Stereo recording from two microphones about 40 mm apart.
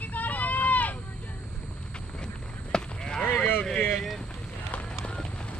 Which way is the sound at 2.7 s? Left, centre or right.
Centre.